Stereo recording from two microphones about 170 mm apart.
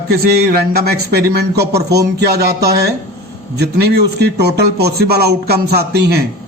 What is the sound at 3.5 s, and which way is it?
A man's voice, 70° right (ahead or behind).